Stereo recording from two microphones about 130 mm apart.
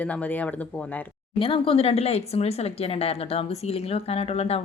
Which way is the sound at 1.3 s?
45° left (ahead or behind).